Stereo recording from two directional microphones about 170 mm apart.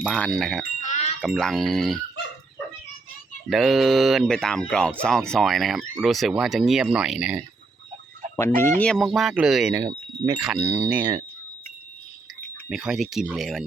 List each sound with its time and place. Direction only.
0.0 s speech: 5° left (ahead or behind)
0.8 s music: 40° left (ahead or behind)
1.2 s speech: centre (ahead or behind)
3.5 s speech: centre (ahead or behind)
8.8 s speech: 5° left (ahead or behind)
12.6 s speech: 5° right (ahead or behind)